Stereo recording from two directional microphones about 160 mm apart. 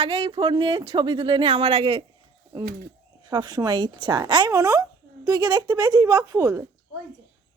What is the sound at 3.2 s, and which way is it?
A woman's voice, 25° right (ahead or behind).